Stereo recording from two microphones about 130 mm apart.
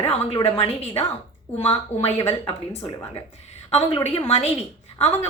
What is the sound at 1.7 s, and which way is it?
Speech, 50° left (ahead or behind).